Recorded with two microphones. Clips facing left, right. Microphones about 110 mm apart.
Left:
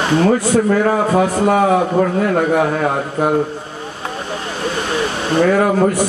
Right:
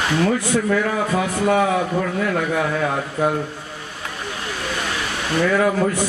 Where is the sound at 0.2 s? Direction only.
40° left (ahead or behind).